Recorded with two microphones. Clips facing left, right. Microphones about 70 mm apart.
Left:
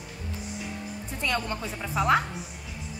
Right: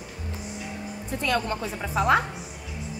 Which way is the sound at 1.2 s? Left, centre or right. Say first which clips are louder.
Right 3 dB; centre.